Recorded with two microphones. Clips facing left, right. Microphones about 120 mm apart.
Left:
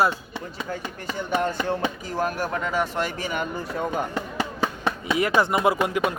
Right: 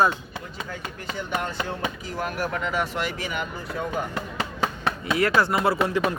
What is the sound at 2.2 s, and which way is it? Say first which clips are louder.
Speech: left 2 dB; 40° left (ahead or behind).